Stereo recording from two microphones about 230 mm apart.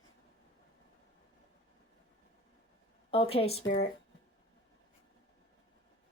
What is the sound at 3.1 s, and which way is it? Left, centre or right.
Speech, left.